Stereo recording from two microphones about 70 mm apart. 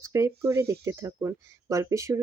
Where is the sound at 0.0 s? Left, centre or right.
Right.